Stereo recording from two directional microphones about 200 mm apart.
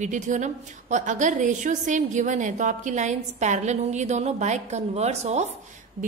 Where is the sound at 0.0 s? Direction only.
35° right (ahead or behind).